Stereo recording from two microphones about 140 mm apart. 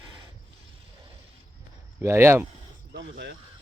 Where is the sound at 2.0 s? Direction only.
20° right (ahead or behind).